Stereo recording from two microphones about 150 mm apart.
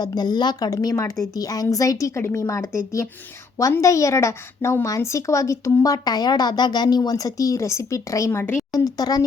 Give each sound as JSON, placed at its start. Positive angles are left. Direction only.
{"t": 0.0, "sound": "a woman's voice", "side_deg": 25}